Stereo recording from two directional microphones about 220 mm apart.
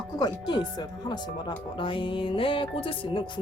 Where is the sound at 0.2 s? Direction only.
20° left (ahead or behind).